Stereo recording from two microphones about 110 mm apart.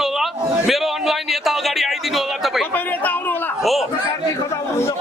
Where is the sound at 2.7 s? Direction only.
15° left (ahead or behind).